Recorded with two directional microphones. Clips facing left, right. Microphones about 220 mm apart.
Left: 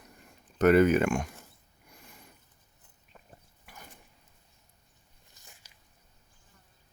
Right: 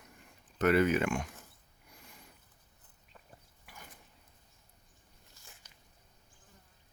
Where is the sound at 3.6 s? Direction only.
50° left (ahead or behind).